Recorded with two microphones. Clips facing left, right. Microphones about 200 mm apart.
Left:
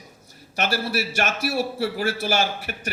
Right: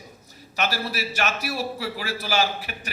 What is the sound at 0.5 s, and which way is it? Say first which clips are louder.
A man's voice: left 3 dB; 45° left (ahead or behind).